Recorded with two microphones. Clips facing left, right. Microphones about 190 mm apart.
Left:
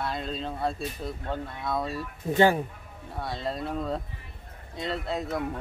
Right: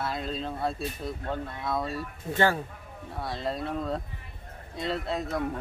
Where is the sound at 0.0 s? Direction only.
Centre (ahead or behind).